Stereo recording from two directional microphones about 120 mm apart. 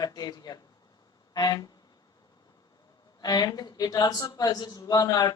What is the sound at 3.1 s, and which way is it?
Speech, 35° left (ahead or behind).